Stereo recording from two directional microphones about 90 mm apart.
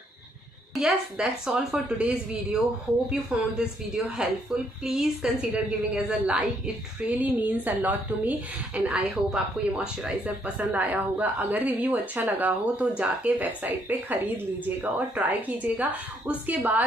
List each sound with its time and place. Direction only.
0.7 s speech: 5° right (ahead or behind)
8.8 s speech: 5° right (ahead or behind)